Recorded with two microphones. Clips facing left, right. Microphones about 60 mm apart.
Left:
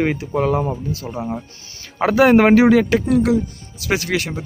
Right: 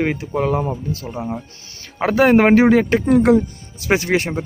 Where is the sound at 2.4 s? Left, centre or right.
Right.